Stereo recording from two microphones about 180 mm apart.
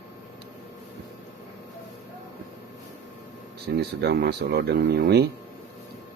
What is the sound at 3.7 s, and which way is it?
Speech, 65° right (ahead or behind).